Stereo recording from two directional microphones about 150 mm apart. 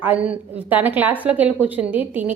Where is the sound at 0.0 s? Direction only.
10° right (ahead or behind).